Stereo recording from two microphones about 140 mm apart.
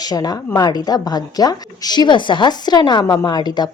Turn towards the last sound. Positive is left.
turn(degrees=30)  # may be behind; listen again after turning